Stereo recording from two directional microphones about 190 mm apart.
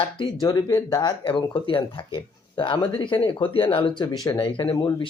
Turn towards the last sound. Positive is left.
turn(degrees=25)  # may be behind; listen again after turning